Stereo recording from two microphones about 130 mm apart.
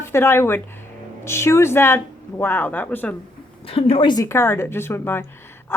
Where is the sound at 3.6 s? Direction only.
45° left (ahead or behind).